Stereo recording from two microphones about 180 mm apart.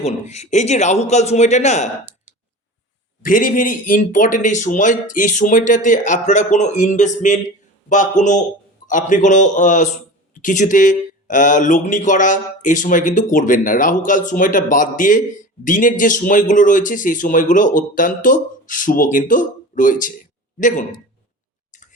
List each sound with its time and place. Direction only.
0.0 s a man's voice: 40° left (ahead or behind)
3.2 s speech: 50° left (ahead or behind)
21.7 s a sound: 45° left (ahead or behind)